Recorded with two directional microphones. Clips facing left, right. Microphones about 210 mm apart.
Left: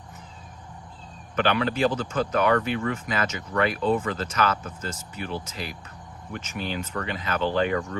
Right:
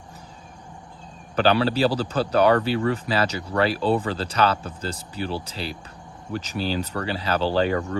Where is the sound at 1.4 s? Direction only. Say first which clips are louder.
Right 3 dB; 35° right (ahead or behind).